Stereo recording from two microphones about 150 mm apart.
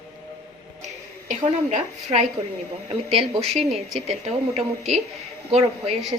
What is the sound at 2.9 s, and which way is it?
A woman's voice, 40° right (ahead or behind).